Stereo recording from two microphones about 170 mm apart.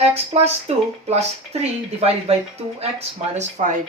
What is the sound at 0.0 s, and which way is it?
Speech, 35° right (ahead or behind).